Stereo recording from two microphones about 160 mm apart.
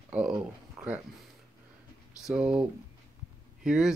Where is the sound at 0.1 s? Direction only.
10° right (ahead or behind).